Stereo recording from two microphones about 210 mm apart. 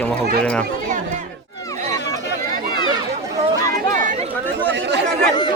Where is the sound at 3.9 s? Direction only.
40° right (ahead or behind).